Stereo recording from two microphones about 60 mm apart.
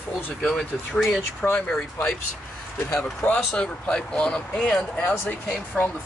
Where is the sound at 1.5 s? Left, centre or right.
Left.